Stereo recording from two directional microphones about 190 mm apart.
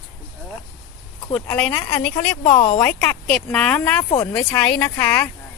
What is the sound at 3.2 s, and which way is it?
Speech, 5° left (ahead or behind).